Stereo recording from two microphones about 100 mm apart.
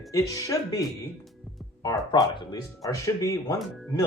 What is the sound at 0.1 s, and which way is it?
Speech, 35° left (ahead or behind).